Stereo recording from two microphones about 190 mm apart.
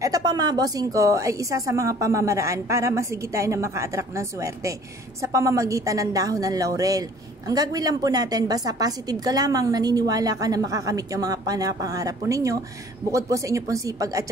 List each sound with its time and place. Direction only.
0.0 s a woman's voice: 20° right (ahead or behind)